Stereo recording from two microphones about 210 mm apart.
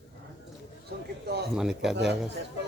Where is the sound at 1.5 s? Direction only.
5° right (ahead or behind).